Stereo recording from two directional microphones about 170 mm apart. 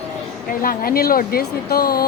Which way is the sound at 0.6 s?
60° left (ahead or behind).